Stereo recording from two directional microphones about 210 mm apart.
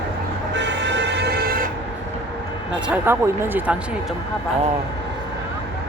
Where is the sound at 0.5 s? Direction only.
55° right (ahead or behind).